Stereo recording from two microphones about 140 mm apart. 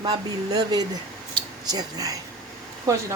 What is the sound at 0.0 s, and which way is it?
Speech, 30° right (ahead or behind).